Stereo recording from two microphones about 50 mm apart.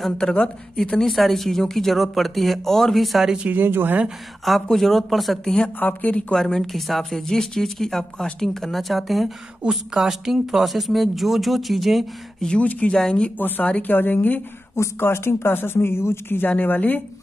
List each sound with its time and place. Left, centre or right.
0.2 s speech: left
1.0 s speech: centre
3.4 s speech: right
4.5 s speech: centre
5.4 s a woman's voice: centre
5.8 s a woman's voice: left
6.3 s a woman's voice: centre
12.5 s speech: left
13.4 s a woman's voice: left
13.7 s speech: left
13.9 s a woman's voice: left
14.8 s speech: left
16.4 s a woman's voice: left